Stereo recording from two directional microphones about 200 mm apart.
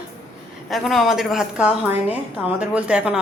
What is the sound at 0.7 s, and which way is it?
A woman's voice, centre (ahead or behind).